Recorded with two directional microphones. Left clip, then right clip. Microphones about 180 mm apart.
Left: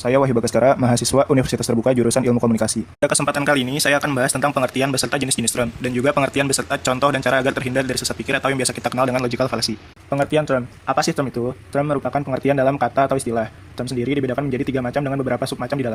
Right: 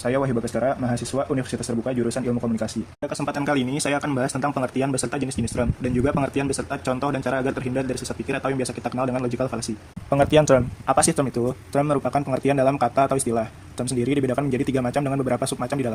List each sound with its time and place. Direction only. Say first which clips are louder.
0.0 s speech: left 6 dB; 20° left (ahead or behind)
3.1 s speech: left 4 dB; 5° left (ahead or behind)
10.1 s speech: right 2 dB; 10° right (ahead or behind)